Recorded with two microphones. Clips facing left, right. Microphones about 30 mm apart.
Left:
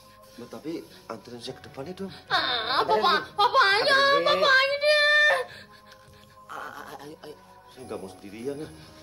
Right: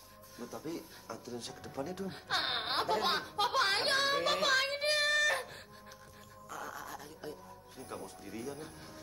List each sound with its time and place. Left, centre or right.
0.4 s speech: left
4.2 s music: left
6.5 s speech: left